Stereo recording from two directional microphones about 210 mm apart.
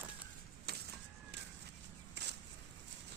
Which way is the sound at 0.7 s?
50° right (ahead or behind).